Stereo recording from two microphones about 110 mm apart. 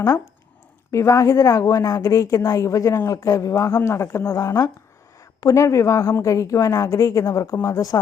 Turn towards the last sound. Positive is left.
turn(degrees=30)  # may be behind; listen again after turning